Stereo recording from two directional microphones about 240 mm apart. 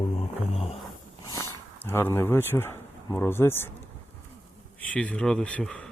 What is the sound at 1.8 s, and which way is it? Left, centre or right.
Speech, centre.